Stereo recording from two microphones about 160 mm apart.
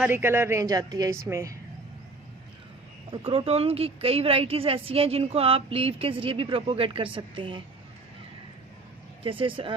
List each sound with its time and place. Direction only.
0.0 s a woman's voice: 15° right (ahead or behind)
3.1 s a woman's voice: 35° right (ahead or behind)
9.2 s a woman's voice: 35° right (ahead or behind)